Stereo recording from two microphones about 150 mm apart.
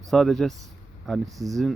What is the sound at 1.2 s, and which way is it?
Speech, 25° right (ahead or behind).